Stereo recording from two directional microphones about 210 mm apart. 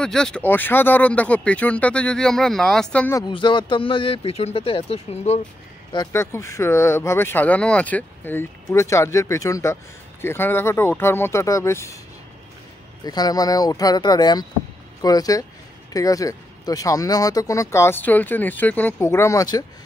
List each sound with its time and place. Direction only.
0.0 s speech: 5° left (ahead or behind)
3.2 s speech: 20° left (ahead or behind)
5.9 s speech: 15° left (ahead or behind)
13.0 s speech: 20° left (ahead or behind)